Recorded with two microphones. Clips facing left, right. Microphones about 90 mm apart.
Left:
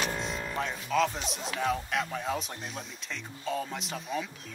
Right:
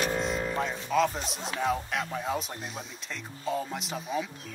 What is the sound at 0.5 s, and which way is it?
Music, centre (ahead or behind).